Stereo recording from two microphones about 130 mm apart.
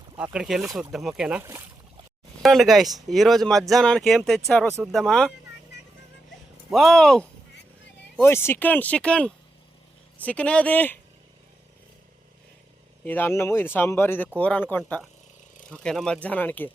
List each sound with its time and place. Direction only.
0.2 s speech: 5° right (ahead or behind)
1.4 s speech: 20° right (ahead or behind)
2.4 s speech: centre (ahead or behind)
6.7 s speech: centre (ahead or behind)
8.1 s speech: 20° left (ahead or behind)
13.1 s speech: 15° left (ahead or behind)